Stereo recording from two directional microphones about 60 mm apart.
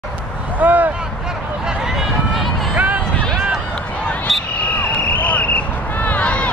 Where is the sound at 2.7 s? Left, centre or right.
Right.